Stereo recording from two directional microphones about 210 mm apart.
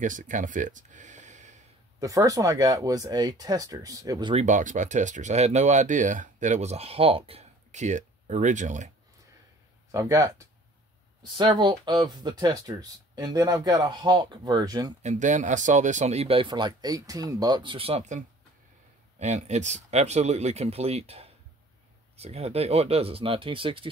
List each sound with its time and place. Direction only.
0.0 s speech: 35° right (ahead or behind)
2.0 s speech: 15° right (ahead or behind)
4.5 s speech: 35° right (ahead or behind)
9.8 s speech: 15° right (ahead or behind)
15.0 s speech: 35° right (ahead or behind)